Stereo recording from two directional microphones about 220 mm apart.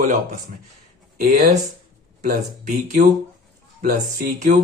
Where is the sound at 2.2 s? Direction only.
35° right (ahead or behind).